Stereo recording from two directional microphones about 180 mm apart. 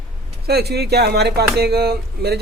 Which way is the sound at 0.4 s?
65° right (ahead or behind).